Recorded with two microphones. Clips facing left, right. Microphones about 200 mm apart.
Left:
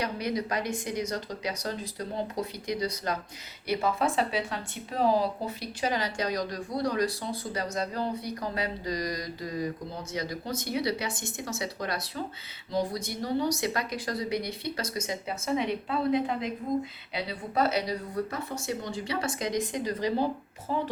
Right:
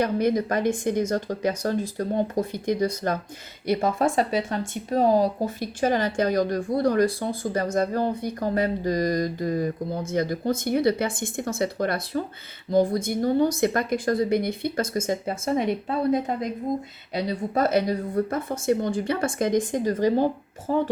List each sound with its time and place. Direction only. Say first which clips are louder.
0.0 s speech: right 8 dB; 50° right (ahead or behind)